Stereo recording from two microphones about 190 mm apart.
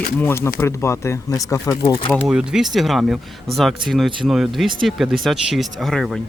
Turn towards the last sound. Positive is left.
turn(degrees=0)  # may be behind; listen again after turning